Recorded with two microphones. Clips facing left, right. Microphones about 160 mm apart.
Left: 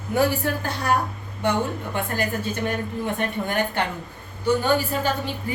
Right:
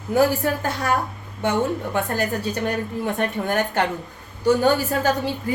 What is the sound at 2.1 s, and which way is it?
A woman's voice, 40° right (ahead or behind).